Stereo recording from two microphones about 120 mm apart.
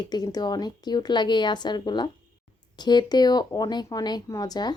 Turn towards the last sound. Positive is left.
turn(degrees=35)  # may be behind; listen again after turning